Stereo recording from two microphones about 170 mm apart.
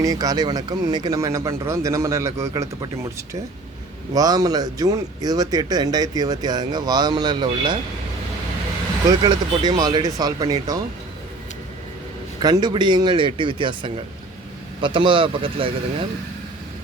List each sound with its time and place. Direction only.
0.0 s speech: 20° right (ahead or behind)
4.1 s speech: 20° right (ahead or behind)
9.0 s speech: 25° right (ahead or behind)
12.4 s speech: 25° right (ahead or behind)